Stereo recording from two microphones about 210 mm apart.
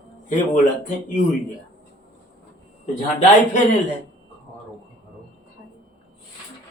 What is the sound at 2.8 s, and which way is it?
Speech, 35° left (ahead or behind).